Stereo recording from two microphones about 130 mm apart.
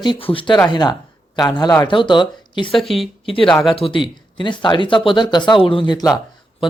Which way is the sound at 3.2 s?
45° left (ahead or behind).